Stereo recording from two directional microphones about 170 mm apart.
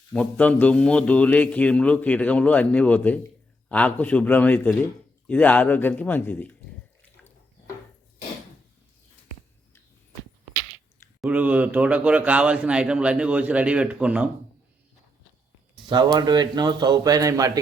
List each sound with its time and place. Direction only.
0.1 s a man's voice: 5° left (ahead or behind)
11.2 s a man's voice: 10° right (ahead or behind)
16.1 s speech: 25° right (ahead or behind)